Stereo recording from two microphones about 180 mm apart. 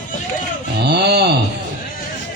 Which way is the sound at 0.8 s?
65° right (ahead or behind).